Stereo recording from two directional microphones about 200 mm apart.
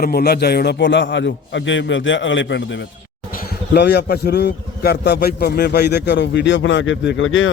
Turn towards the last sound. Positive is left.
turn(degrees=80)